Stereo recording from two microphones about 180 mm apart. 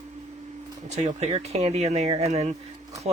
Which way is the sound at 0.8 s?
40° right (ahead or behind).